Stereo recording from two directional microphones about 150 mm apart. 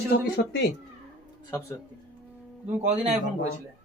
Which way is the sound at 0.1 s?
90° left.